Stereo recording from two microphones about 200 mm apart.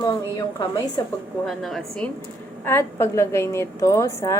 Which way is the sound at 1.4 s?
Centre (ahead or behind).